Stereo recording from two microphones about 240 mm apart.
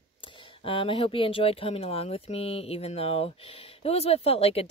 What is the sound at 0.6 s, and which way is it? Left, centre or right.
Speech, left.